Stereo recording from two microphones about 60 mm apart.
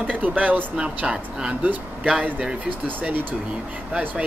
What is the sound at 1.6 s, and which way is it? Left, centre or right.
Speech, right.